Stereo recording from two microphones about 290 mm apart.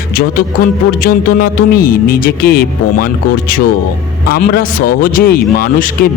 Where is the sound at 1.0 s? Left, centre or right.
Left.